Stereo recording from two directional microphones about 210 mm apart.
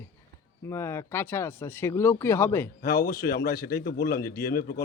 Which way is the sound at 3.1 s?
45° left (ahead or behind).